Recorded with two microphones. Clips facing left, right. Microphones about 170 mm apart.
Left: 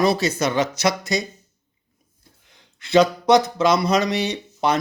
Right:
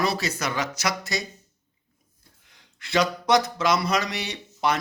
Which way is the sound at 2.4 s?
20° left (ahead or behind).